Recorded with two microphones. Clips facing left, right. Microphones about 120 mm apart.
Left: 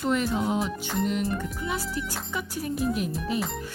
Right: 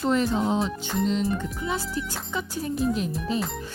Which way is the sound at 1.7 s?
25° right (ahead or behind).